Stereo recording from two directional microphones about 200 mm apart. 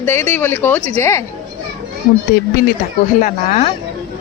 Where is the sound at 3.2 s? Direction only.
30° left (ahead or behind).